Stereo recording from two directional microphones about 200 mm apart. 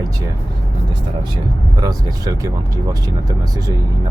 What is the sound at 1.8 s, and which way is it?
Speech, 15° right (ahead or behind).